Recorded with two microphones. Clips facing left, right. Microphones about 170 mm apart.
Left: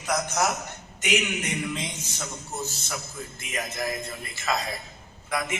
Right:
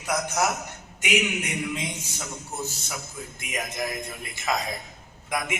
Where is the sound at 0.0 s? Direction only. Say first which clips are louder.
Even; 10° right (ahead or behind).